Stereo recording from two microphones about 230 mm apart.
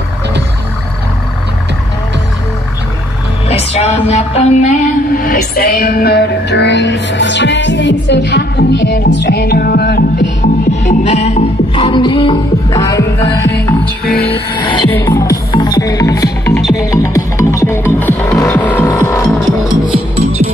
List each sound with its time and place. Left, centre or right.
3.4 s music: left
5.2 s music: left
10.4 s music: left
14.9 s music: centre
19.4 s music: centre